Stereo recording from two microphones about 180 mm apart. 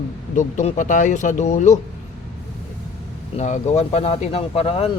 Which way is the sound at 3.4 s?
40° left (ahead or behind).